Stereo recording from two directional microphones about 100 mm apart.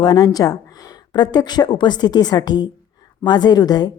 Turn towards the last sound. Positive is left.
turn(degrees=40)  # may be behind; listen again after turning